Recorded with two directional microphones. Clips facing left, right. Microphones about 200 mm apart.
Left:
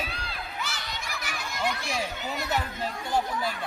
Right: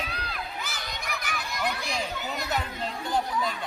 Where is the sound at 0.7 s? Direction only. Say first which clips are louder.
Right 1 dB; 60° right (ahead or behind).